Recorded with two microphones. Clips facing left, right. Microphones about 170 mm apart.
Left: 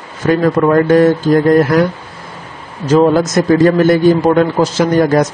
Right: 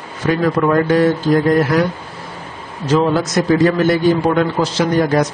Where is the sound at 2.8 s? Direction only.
40° left (ahead or behind).